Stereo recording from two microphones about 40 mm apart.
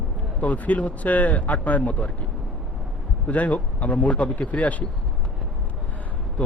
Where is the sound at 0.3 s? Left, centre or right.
Left.